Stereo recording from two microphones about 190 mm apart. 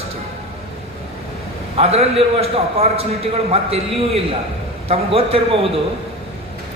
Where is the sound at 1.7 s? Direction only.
30° right (ahead or behind).